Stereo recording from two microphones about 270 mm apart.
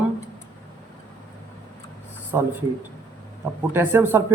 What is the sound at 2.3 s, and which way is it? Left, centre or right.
Speech, centre.